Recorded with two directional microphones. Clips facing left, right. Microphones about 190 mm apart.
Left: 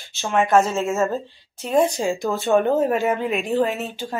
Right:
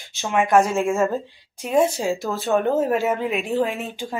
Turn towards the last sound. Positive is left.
turn(degrees=-10)  # may be behind; listen again after turning